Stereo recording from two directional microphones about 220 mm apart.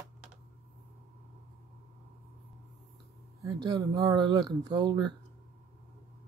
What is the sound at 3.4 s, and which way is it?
Speech, 15° right (ahead or behind).